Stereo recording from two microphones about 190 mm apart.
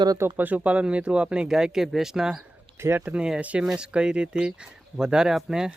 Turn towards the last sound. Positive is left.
turn(degrees=-5)  # may be behind; listen again after turning